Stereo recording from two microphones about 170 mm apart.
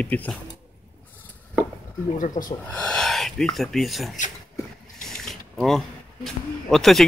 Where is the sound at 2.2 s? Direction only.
50° left (ahead or behind).